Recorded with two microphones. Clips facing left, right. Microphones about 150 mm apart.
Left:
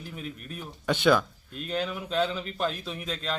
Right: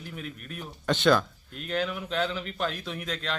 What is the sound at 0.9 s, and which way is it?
Speech, 10° left (ahead or behind).